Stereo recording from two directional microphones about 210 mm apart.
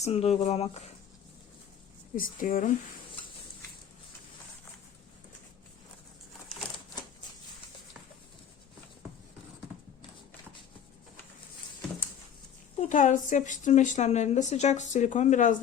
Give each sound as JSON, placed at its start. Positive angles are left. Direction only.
{"t": 0.0, "sound": "speech", "side_deg": 30}
{"t": 2.1, "sound": "a woman's voice", "side_deg": 40}
{"t": 12.8, "sound": "a woman's voice", "side_deg": 35}